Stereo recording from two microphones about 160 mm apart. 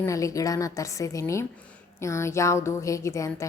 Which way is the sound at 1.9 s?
15° left (ahead or behind).